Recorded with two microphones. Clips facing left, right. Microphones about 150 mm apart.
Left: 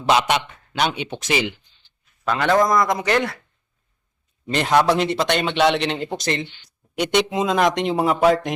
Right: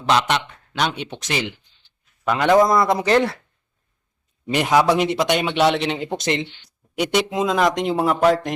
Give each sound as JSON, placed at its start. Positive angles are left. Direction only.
{"t": 0.0, "sound": "speech", "side_deg": 5}
{"t": 2.2, "sound": "speech", "side_deg": -15}
{"t": 2.6, "sound": "a man's voice", "side_deg": -25}
{"t": 4.4, "sound": "speech", "side_deg": -10}
{"t": 6.1, "sound": "a man's voice", "side_deg": -20}
{"t": 7.0, "sound": "speech", "side_deg": 0}